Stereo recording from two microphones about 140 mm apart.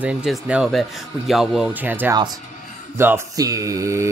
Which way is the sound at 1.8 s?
15° right (ahead or behind).